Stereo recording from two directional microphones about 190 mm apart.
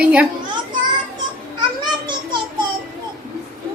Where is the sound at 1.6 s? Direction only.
25° right (ahead or behind).